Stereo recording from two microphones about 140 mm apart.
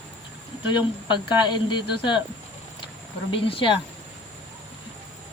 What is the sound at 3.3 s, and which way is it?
Speech, 40° left (ahead or behind).